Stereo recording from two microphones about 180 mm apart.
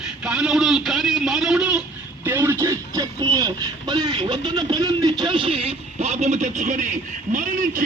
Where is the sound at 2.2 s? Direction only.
15° right (ahead or behind).